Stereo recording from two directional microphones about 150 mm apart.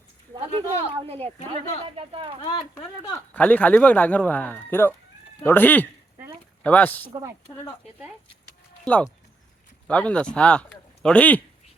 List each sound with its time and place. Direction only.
0.9 s speech: 40° right (ahead or behind)
2.4 s speech: 25° left (ahead or behind); by 7.1 s 10° left (ahead or behind)
7.1 s speech: 20° right (ahead or behind)
8.8 s speech: 10° left (ahead or behind)